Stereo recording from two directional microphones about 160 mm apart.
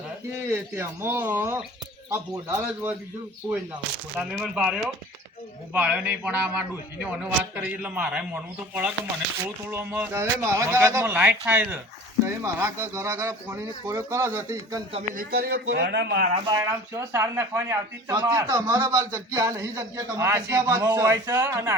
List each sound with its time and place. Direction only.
0.5 s a man's voice: 15° right (ahead or behind)
4.2 s a man's voice: 5° right (ahead or behind)
15.1 s speech: 65° right (ahead or behind); by 16.3 s 90° right
16.5 s speech: 20° right (ahead or behind)